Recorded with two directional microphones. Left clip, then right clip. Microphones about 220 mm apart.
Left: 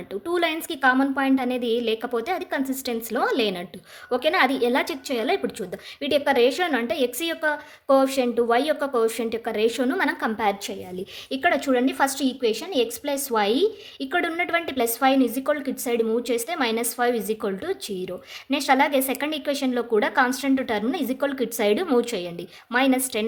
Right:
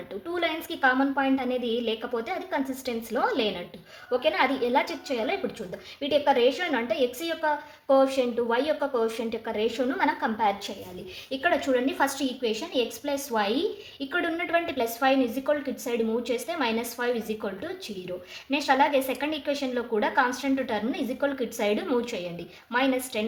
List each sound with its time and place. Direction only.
0.1 s a woman's voice: 35° left (ahead or behind)